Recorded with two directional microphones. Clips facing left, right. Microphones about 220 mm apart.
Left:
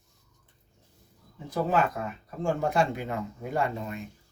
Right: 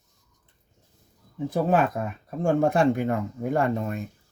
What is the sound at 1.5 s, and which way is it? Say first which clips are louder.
Speech: right 4 dB; 55° right (ahead or behind).